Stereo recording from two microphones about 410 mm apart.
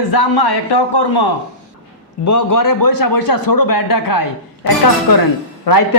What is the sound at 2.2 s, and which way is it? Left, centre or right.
A man's voice, left.